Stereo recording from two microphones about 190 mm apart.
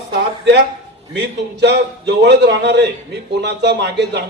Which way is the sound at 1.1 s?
65° right (ahead or behind).